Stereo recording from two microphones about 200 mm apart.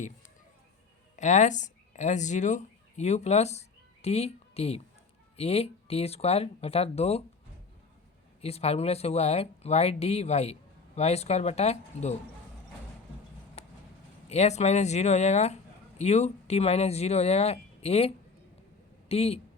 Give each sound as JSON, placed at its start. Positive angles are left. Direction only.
{"t": 1.1, "sound": "speech", "side_deg": 35}
{"t": 8.4, "sound": "speech", "side_deg": 30}
{"t": 14.3, "sound": "a man's voice", "side_deg": 35}